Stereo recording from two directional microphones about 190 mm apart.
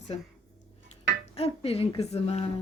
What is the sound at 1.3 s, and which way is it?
A woman's voice, 30° left (ahead or behind).